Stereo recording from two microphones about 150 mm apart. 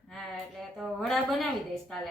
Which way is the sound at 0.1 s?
Centre (ahead or behind).